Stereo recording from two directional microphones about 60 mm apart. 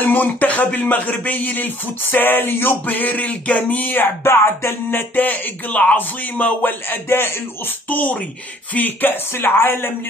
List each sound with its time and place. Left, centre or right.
0.0 s speech: left